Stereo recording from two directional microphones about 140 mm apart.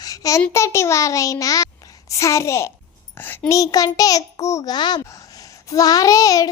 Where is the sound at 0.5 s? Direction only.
20° left (ahead or behind).